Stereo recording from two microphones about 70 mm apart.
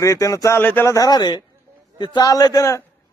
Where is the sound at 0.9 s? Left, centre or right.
Left.